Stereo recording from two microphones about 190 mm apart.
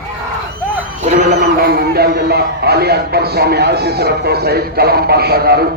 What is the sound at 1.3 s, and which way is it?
A man's voice, 55° right (ahead or behind).